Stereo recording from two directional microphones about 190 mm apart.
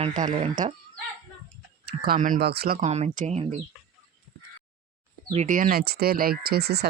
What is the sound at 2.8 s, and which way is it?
Speech, 35° right (ahead or behind).